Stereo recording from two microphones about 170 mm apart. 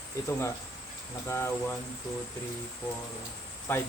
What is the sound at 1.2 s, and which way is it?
Speech, 15° left (ahead or behind).